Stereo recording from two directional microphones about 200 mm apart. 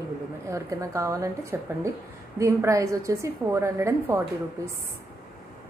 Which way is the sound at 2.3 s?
15° right (ahead or behind).